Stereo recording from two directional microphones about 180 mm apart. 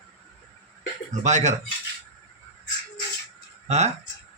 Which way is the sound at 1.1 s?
40° right (ahead or behind).